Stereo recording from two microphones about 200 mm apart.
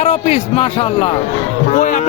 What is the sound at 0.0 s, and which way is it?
A man's voice, 30° left (ahead or behind).